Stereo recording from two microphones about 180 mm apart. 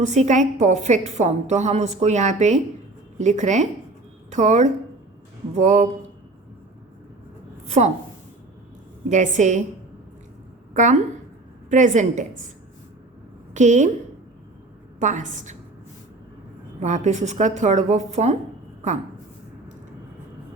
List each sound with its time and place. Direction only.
0.0 s a woman's voice: 40° right (ahead or behind)
9.0 s a woman's voice: 40° right (ahead or behind)
10.8 s a woman's voice: 40° right (ahead or behind)
13.5 s a woman's voice: 40° right (ahead or behind)
14.9 s a woman's voice: 40° right (ahead or behind)
16.8 s a woman's voice: 40° right (ahead or behind)